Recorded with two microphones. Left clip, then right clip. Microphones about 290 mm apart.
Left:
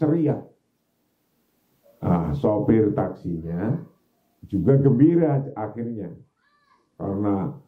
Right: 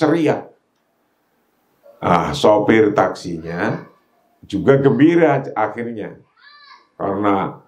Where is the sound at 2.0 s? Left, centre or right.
Centre.